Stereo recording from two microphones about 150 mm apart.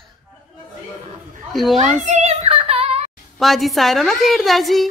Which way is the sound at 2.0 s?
50° right (ahead or behind).